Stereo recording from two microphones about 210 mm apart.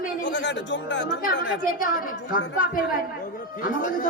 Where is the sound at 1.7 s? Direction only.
40° left (ahead or behind).